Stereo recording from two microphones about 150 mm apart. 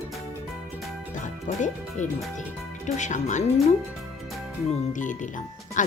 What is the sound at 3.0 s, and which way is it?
Speech, 55° left (ahead or behind).